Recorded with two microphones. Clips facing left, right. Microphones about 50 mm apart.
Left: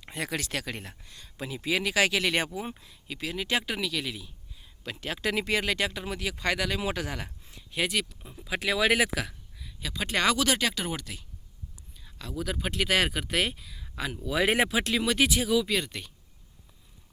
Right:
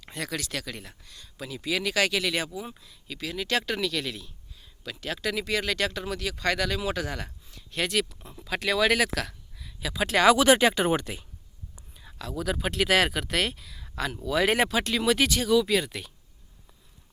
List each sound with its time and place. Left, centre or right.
0.0 s speech: left
3.3 s speech: centre
4.8 s speech: left
7.7 s speech: centre
10.3 s speech: right
12.2 s speech: centre
15.0 s speech: centre